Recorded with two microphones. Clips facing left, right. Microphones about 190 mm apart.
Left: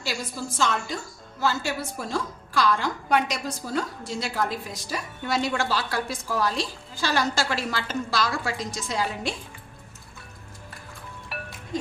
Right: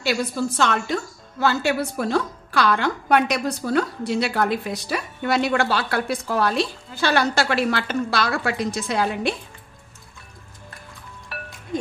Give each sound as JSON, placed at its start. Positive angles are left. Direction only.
{"t": 0.0, "sound": "a woman's voice", "side_deg": -65}